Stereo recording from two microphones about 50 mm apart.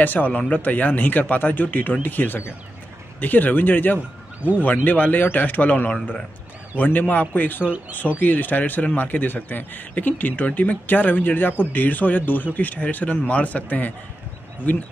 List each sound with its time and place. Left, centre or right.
0.0 s speech: left